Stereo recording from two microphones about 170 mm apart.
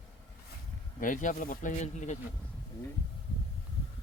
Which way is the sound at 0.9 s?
50° left (ahead or behind).